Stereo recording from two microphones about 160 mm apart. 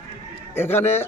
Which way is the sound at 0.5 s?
15° left (ahead or behind).